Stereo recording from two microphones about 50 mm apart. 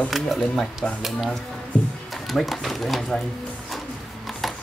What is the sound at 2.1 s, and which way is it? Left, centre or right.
Speech, centre.